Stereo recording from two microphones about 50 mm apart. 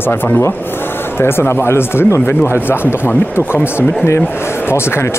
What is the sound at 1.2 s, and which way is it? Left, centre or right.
Speech, left.